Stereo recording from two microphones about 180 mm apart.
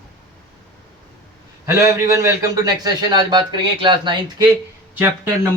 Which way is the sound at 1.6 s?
15° right (ahead or behind).